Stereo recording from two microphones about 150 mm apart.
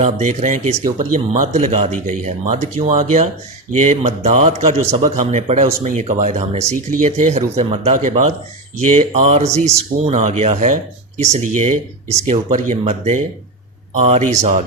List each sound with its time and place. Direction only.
0.0 s speech: 50° right (ahead or behind)
7.9 s speech: 55° right (ahead or behind)